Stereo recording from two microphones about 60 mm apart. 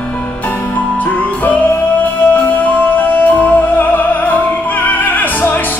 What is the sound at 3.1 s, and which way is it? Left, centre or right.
Music, left.